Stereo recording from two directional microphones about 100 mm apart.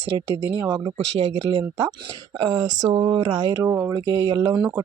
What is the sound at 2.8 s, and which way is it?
Speech, 55° right (ahead or behind).